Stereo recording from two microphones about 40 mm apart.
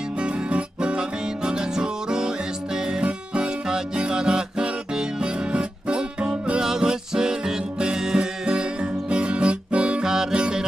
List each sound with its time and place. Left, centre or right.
0.2 s music: right
6.6 s music: centre
10.0 s music: centre